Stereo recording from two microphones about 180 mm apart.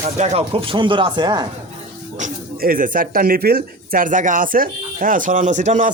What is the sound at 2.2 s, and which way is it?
Speech, 50° right (ahead or behind).